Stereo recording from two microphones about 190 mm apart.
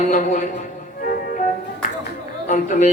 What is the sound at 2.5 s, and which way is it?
Speech, 40° left (ahead or behind).